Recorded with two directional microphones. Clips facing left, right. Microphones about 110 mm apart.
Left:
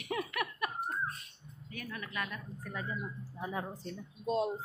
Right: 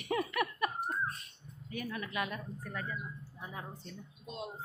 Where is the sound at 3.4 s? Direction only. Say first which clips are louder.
Left 7 dB; 60° left (ahead or behind).